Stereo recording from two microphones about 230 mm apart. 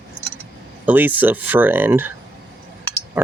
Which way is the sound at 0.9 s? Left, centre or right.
Centre.